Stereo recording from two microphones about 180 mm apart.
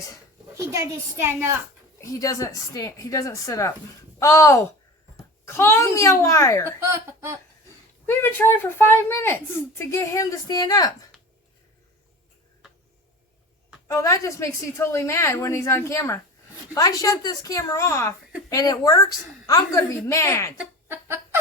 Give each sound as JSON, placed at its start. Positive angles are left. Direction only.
{"t": 0.5, "sound": "a woman's voice", "side_deg": -15}
{"t": 2.0, "sound": "a woman's voice", "side_deg": 20}
{"t": 6.7, "sound": "a woman's voice", "side_deg": -15}
{"t": 8.0, "sound": "speech", "side_deg": 10}
{"t": 13.8, "sound": "a woman's voice", "side_deg": 15}
{"t": 20.6, "sound": "speech", "side_deg": -10}